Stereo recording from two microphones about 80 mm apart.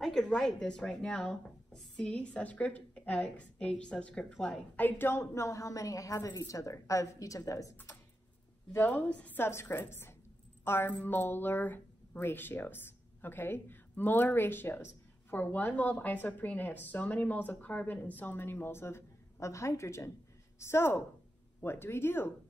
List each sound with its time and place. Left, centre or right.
0.0 s a woman's voice: centre
4.7 s a woman's voice: left
8.7 s speech: left
9.4 s a woman's voice: left